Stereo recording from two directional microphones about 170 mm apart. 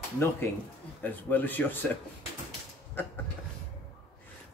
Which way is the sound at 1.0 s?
10° left (ahead or behind).